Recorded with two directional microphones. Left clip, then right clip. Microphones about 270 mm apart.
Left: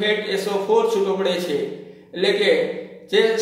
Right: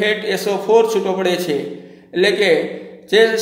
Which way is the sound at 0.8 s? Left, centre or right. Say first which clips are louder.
Right 2 dB; right.